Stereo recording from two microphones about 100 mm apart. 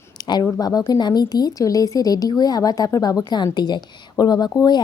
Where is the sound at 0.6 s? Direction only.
40° left (ahead or behind).